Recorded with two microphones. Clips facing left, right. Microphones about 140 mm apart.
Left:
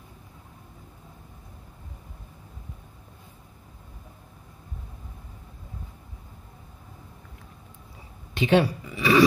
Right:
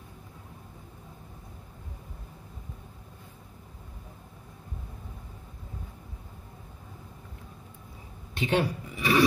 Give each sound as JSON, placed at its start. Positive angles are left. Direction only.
{"t": 8.4, "sound": "speech", "side_deg": 90}